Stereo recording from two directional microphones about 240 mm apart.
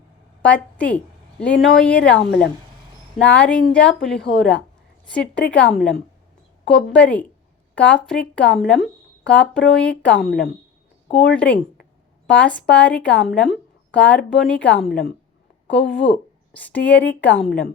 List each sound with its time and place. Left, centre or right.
0.4 s a woman's voice: centre
2.1 s a woman's voice: left
3.2 s a woman's voice: centre
10.2 s a woman's voice: left
11.1 s a woman's voice: centre
14.8 s a woman's voice: left
16.0 s a woman's voice: centre